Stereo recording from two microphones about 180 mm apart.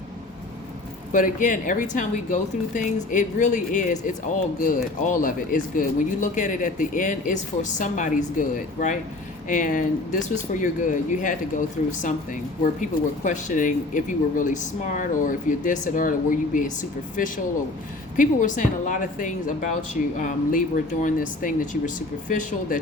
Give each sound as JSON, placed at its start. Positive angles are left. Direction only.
{"t": 1.1, "sound": "a woman's voice", "side_deg": 45}